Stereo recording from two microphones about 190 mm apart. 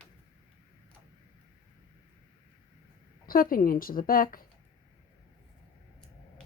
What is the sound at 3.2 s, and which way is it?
A woman's voice, 50° left (ahead or behind).